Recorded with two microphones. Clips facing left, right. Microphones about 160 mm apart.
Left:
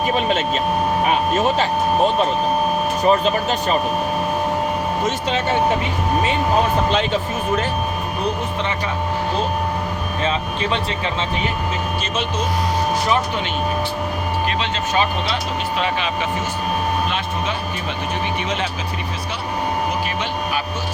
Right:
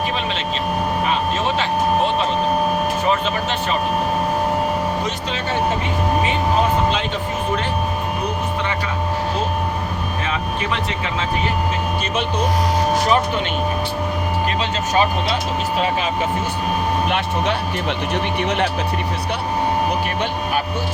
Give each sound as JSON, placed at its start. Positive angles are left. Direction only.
{"t": 3.0, "sound": "speech", "side_deg": 40}
{"t": 10.2, "sound": "speech", "side_deg": 30}
{"t": 17.1, "sound": "speech", "side_deg": -65}